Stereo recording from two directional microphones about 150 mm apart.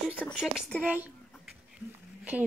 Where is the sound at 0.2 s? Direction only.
5° left (ahead or behind).